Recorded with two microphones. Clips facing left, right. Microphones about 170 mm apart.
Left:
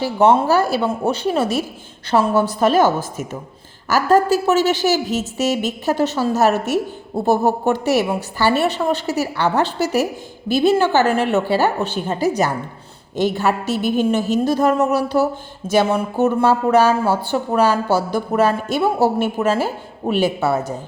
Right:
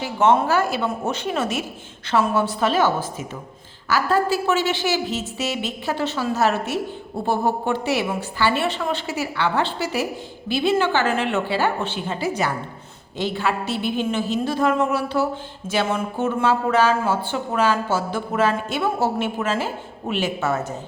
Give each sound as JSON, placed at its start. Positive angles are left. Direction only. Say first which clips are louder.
{"t": 0.0, "sound": "speech", "louder": "left 4 dB", "side_deg": 35}